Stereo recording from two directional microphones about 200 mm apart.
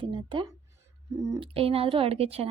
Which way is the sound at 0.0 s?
25° right (ahead or behind).